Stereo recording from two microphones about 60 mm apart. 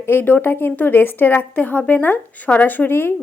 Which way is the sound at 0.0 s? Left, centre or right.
Left.